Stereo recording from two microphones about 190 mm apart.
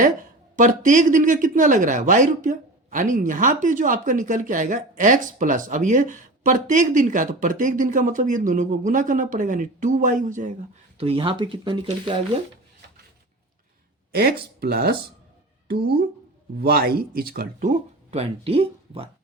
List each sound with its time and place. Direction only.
0.0 s speech: 40° right (ahead or behind)
10.9 s speech: 30° right (ahead or behind)
14.1 s speech: 55° right (ahead or behind); by 19.0 s 30° right (ahead or behind)